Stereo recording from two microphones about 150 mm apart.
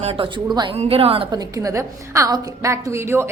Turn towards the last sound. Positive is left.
turn(degrees=-15)  # may be behind; listen again after turning